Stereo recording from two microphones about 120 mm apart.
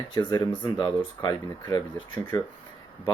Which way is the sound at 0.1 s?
35° left (ahead or behind).